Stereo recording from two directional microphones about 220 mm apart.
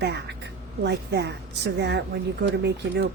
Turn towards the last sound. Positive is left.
turn(degrees=-50)  # may be behind; listen again after turning